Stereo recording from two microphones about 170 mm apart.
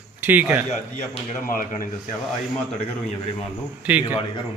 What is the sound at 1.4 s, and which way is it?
Speech, 55° left (ahead or behind).